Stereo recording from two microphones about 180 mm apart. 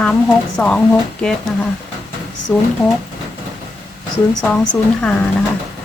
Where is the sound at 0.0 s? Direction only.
5° left (ahead or behind).